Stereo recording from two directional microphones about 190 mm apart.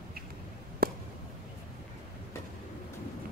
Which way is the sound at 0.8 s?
50° right (ahead or behind).